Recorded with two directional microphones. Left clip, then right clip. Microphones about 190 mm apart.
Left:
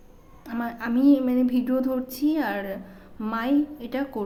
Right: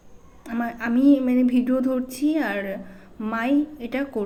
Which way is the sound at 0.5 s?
15° right (ahead or behind).